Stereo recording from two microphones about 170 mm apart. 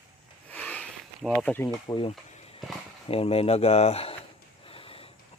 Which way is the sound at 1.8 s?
25° left (ahead or behind).